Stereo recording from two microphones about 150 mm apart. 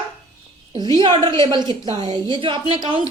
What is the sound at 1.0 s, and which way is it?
A woman's voice, 30° right (ahead or behind).